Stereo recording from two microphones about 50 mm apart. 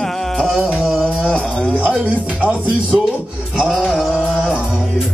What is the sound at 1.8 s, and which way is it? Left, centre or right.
Speech, right.